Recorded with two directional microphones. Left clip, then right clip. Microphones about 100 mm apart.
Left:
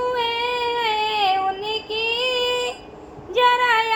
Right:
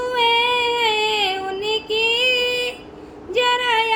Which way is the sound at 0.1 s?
40° right (ahead or behind).